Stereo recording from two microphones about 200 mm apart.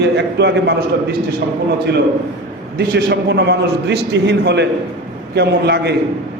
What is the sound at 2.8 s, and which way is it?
A man's voice, 55° right (ahead or behind).